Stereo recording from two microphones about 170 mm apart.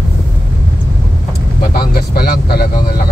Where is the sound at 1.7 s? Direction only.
65° left (ahead or behind).